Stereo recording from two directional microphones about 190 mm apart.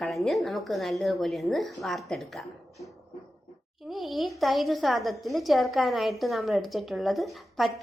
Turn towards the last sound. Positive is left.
turn(degrees=0)  # may be behind; listen again after turning